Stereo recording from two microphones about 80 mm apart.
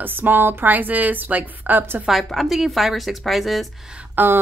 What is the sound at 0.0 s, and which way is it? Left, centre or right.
A woman's voice, right.